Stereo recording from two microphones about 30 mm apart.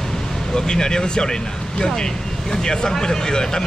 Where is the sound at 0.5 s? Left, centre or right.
Left.